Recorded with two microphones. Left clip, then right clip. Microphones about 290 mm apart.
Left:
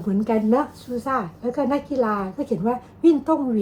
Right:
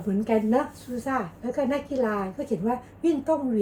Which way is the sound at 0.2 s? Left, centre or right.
Centre.